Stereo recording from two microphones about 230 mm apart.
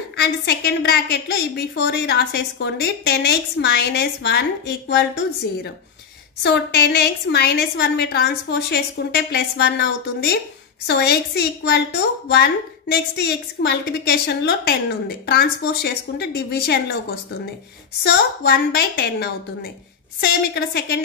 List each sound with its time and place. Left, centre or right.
0.2 s a woman's voice: left
18.0 s a woman's voice: left